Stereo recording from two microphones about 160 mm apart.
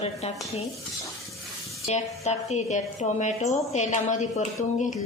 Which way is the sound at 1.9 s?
45° left (ahead or behind).